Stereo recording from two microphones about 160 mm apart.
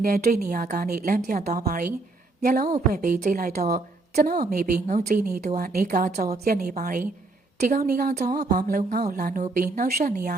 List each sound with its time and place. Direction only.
0.0 s a woman's voice: 65° right (ahead or behind)
1.6 s a woman's voice: 65° right (ahead or behind)
2.9 s a woman's voice: 55° right (ahead or behind)
4.1 s a woman's voice: 55° right (ahead or behind)
4.9 s speech: 50° right (ahead or behind)
5.5 s a woman's voice: 60° right (ahead or behind)